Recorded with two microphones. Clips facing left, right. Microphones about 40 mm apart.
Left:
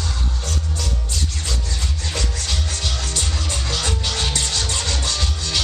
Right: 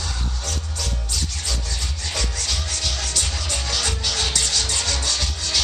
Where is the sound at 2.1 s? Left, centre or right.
Left.